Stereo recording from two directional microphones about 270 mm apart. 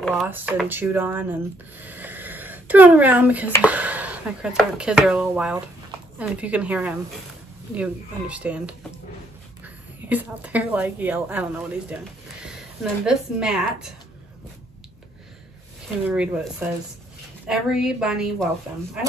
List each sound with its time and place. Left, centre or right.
0.0 s speech: centre
10.0 s speech: centre
16.1 s speech: centre